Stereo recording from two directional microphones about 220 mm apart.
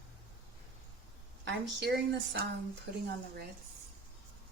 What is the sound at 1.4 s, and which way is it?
Speech, 50° right (ahead or behind).